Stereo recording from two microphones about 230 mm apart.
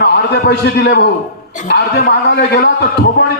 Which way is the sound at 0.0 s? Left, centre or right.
Left.